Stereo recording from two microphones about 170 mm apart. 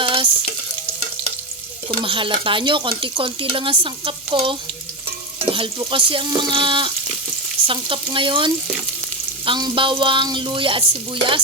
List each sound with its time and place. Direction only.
0.0 s stir: 30° right (ahead or behind)
1.9 s speech: 30° right (ahead or behind)